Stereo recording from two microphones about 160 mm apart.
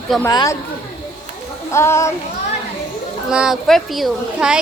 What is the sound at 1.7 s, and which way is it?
Speech, 15° left (ahead or behind).